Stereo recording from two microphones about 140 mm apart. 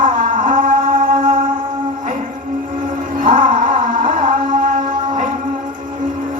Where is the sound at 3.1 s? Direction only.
75° right (ahead or behind).